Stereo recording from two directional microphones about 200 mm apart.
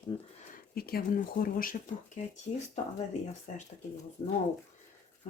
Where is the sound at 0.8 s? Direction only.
50° left (ahead or behind).